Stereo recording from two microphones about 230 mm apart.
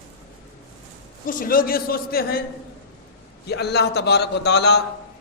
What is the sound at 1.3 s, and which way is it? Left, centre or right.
A man's voice, left.